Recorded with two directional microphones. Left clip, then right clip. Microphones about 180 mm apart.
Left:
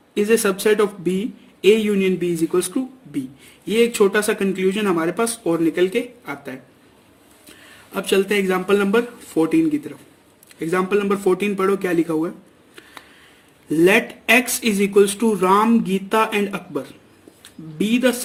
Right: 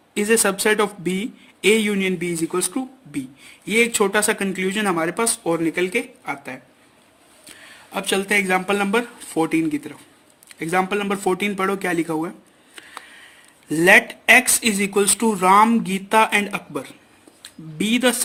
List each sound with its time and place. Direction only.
0.1 s speech: 35° right (ahead or behind)
7.9 s speech: 35° right (ahead or behind)
13.7 s speech: 35° right (ahead or behind)